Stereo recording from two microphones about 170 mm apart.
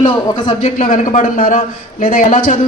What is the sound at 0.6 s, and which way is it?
A man's voice, 50° left (ahead or behind).